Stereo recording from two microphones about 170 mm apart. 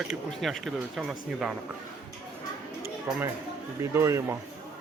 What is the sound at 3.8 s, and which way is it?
Speech, 15° right (ahead or behind).